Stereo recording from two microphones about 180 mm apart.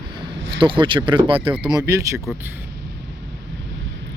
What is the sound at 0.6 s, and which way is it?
Speech, 25° right (ahead or behind).